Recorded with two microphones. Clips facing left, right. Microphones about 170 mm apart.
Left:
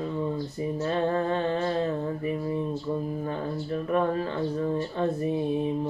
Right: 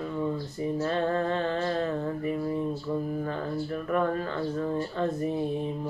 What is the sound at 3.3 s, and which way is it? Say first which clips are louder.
Speech: left 1 dB; 25° left (ahead or behind).